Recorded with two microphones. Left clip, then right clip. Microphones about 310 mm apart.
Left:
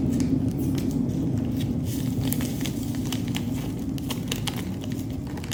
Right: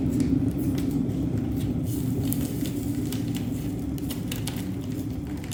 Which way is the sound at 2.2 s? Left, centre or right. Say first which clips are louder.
Even; centre.